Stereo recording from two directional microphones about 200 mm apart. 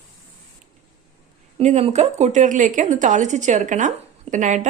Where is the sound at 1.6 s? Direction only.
35° right (ahead or behind).